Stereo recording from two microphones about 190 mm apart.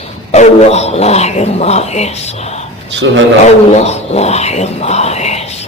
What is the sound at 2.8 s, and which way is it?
Speech, 70° right (ahead or behind).